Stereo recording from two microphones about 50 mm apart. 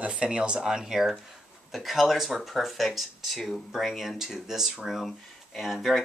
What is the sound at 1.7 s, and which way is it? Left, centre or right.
Speech, centre.